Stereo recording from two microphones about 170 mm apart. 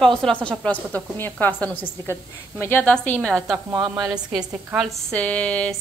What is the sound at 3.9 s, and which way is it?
A woman's voice, 5° right (ahead or behind).